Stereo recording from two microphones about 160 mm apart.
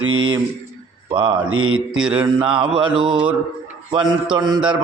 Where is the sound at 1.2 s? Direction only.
30° right (ahead or behind).